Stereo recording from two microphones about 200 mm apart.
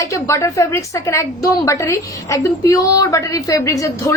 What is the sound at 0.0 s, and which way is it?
A woman's voice, 15° left (ahead or behind).